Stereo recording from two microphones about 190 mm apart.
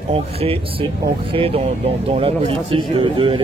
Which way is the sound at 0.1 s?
30° right (ahead or behind).